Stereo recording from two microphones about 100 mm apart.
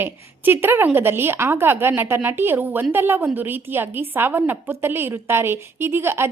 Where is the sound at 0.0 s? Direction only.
20° right (ahead or behind).